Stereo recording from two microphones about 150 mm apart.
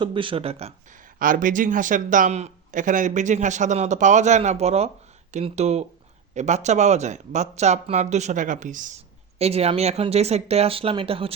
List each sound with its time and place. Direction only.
0.0 s speech: 35° right (ahead or behind)
0.9 s speech: 60° right (ahead or behind)
9.4 s speech: 45° right (ahead or behind)